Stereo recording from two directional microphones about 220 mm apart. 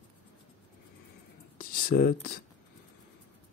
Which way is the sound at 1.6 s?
40° left (ahead or behind).